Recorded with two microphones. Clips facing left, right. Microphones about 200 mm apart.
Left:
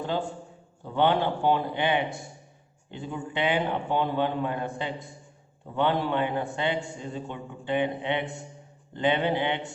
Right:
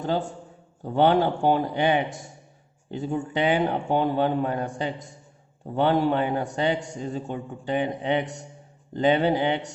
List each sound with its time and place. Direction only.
0.0 s a man's voice: 45° right (ahead or behind)